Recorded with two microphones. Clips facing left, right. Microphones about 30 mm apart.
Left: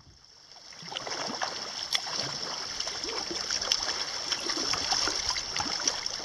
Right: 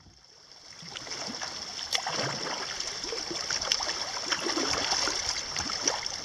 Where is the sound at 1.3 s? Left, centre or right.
Left.